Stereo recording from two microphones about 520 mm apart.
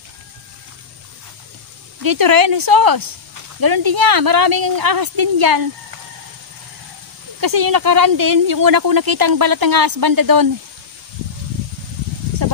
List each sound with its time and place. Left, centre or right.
2.0 s speech: right
7.3 s speech: right